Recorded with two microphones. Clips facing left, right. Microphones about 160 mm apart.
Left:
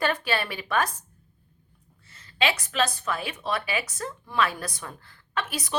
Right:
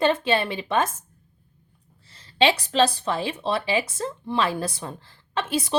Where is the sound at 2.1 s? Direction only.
30° right (ahead or behind).